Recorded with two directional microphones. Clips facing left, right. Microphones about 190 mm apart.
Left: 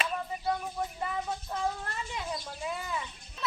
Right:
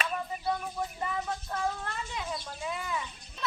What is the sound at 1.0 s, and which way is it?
Speech, 5° left (ahead or behind).